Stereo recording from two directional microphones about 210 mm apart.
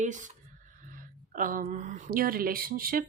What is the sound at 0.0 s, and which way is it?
Speech, 35° right (ahead or behind).